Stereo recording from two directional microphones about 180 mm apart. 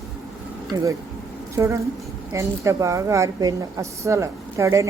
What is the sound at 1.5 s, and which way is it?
A woman's voice, 15° right (ahead or behind).